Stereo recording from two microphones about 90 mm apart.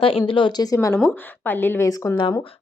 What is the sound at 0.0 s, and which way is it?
Speech, 90° left.